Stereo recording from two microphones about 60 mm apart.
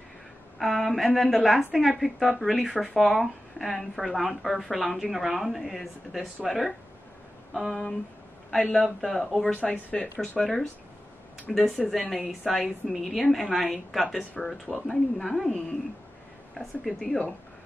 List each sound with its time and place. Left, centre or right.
0.6 s a woman's voice: centre
10.1 s a woman's voice: centre